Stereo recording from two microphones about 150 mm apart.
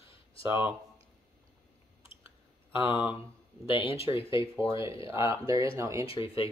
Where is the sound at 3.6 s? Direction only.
35° left (ahead or behind).